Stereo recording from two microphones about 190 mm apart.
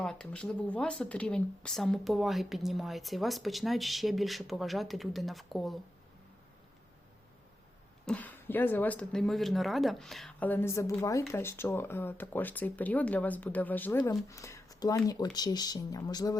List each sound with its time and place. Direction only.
0.0 s speech: 5° left (ahead or behind)
8.0 s speech: 10° left (ahead or behind)